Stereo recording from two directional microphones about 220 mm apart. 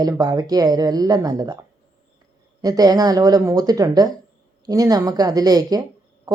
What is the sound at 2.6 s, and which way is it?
Speech, 15° right (ahead or behind).